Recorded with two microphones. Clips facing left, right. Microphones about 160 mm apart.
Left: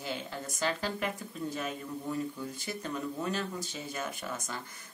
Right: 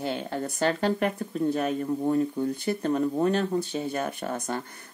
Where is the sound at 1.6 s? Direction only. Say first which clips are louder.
Right 11 dB; 50° right (ahead or behind).